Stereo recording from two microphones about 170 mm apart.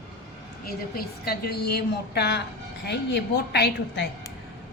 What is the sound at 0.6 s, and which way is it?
A woman's voice, 65° left (ahead or behind).